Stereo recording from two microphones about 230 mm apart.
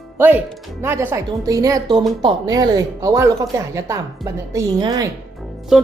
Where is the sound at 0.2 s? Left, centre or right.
Centre.